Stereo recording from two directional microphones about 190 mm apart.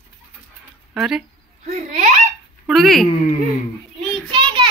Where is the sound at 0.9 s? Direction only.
5° right (ahead or behind).